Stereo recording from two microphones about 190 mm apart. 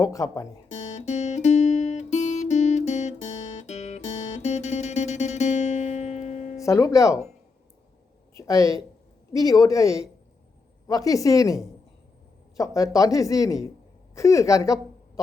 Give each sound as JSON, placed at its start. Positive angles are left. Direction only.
{"t": 0.0, "sound": "speech", "side_deg": 15}
{"t": 0.7, "sound": "guitar", "side_deg": 35}
{"t": 6.6, "sound": "speech", "side_deg": 15}
{"t": 8.4, "sound": "a woman's voice", "side_deg": 15}